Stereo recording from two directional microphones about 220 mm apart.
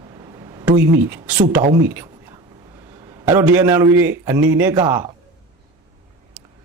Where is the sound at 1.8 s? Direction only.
10° right (ahead or behind).